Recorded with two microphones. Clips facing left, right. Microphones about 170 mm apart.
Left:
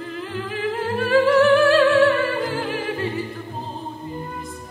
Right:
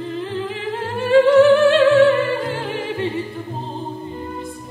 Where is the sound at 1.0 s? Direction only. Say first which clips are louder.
Right 5 dB; 25° right (ahead or behind).